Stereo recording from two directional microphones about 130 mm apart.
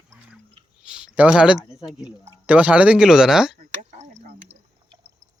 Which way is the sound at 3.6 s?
80° right.